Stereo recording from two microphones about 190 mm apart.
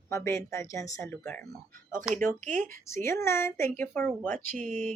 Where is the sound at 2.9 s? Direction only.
15° left (ahead or behind).